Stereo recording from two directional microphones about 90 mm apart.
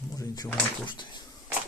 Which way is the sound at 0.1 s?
40° left (ahead or behind).